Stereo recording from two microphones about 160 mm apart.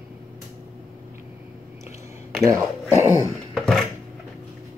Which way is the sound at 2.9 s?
20° right (ahead or behind).